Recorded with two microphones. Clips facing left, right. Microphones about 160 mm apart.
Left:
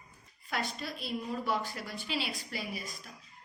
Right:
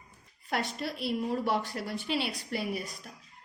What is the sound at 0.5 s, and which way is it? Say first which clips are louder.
A woman's voice: right 4 dB; 65° right (ahead or behind).